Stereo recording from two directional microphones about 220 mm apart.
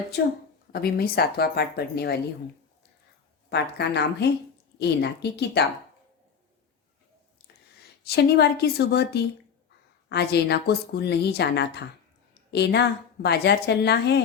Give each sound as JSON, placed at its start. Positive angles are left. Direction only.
{"t": 0.1, "sound": "speech", "side_deg": 45}
{"t": 3.5, "sound": "speech", "side_deg": 50}
{"t": 8.0, "sound": "speech", "side_deg": 45}